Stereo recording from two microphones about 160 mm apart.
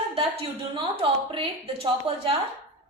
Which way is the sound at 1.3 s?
35° right (ahead or behind).